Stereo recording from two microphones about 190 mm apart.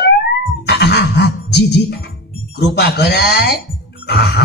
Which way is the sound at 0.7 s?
55° left (ahead or behind).